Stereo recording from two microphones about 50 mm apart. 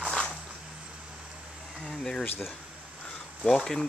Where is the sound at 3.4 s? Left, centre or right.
Centre.